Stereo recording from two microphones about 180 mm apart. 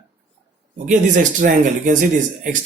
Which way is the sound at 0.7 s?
45° right (ahead or behind).